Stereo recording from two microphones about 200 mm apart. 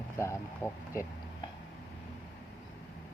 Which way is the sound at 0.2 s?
15° left (ahead or behind).